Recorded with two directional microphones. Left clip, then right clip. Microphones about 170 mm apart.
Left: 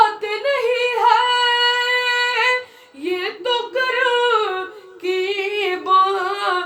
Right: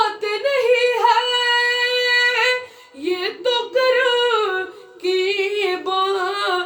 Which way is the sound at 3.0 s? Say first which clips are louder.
Right 1 dB; 15° right (ahead or behind).